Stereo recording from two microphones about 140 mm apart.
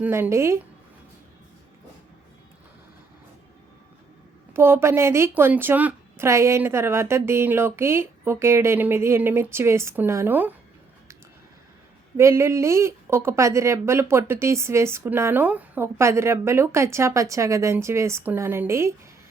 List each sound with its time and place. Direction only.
0.0 s speech: 15° right (ahead or behind)
4.5 s a woman's voice: 15° right (ahead or behind)
12.1 s speech: 20° right (ahead or behind)